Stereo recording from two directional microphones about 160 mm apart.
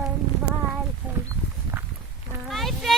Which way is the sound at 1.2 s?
15° right (ahead or behind).